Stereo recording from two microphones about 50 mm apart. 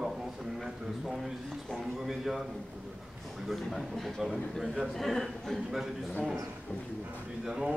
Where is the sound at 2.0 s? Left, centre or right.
Centre.